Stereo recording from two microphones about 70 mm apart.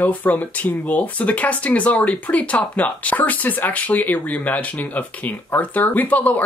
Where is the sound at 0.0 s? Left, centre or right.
Left.